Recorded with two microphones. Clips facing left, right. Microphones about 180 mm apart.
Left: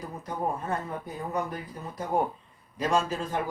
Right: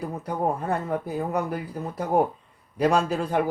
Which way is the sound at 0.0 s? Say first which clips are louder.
Right 5 dB; 65° right (ahead or behind).